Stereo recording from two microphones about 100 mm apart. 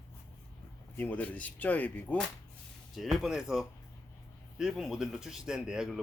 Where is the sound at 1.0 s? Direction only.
15° left (ahead or behind).